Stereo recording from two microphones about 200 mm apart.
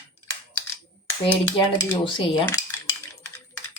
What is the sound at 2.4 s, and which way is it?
Cutlery, 15° left (ahead or behind).